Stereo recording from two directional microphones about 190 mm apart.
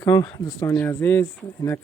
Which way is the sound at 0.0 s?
20° left (ahead or behind).